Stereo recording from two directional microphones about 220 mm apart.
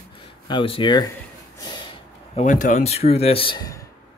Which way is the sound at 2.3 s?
35° left (ahead or behind).